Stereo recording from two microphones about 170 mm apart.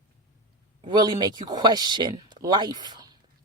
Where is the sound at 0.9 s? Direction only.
25° right (ahead or behind).